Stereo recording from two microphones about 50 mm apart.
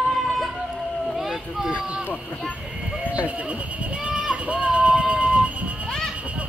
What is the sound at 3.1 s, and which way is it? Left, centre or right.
Sheep, right.